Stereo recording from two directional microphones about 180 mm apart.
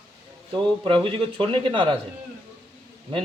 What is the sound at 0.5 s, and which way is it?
A man's voice, 30° right (ahead or behind).